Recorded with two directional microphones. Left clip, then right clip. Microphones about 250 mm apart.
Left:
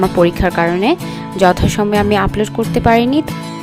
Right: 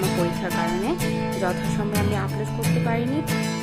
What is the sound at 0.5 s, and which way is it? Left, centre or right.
Speech, left.